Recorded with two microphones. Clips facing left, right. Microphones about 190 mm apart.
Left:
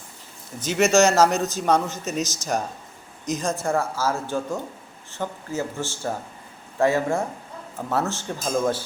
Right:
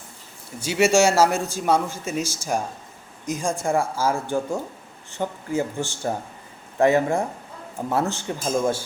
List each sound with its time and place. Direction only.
0.6 s speech: 10° right (ahead or behind)